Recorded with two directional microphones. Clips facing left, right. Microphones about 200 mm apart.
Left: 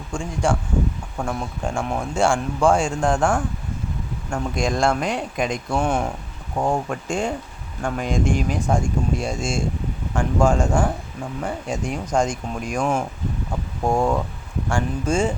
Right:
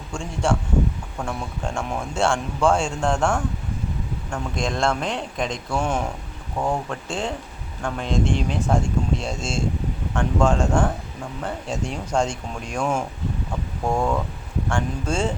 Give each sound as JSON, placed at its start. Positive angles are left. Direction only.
{"t": 0.1, "sound": "speech", "side_deg": 5}
{"t": 13.8, "sound": "speech", "side_deg": 25}
{"t": 14.7, "sound": "speech", "side_deg": 10}